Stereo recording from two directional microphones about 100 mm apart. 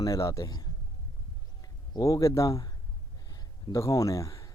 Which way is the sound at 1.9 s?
35° left (ahead or behind).